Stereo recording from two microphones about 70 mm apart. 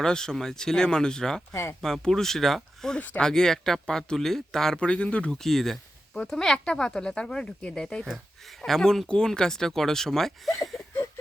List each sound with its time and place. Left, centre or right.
0.0 s speech: centre
3.0 s speech: left
3.2 s speech: centre